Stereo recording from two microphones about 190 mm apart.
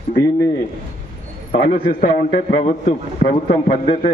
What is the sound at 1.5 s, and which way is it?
A man's voice, 40° left (ahead or behind).